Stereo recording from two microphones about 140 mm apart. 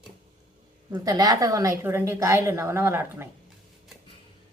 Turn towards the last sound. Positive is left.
turn(degrees=-15)  # may be behind; listen again after turning